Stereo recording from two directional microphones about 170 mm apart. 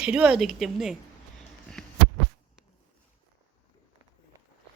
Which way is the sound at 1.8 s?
5° left (ahead or behind).